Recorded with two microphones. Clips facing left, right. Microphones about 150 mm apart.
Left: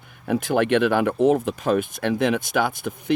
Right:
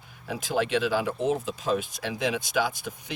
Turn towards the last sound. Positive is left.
turn(degrees=55)  # may be behind; listen again after turning